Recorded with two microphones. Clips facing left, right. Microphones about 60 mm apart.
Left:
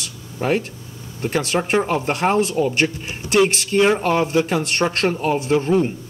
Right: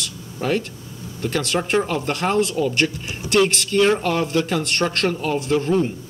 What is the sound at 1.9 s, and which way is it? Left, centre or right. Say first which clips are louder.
Speech: left 3 dB; left.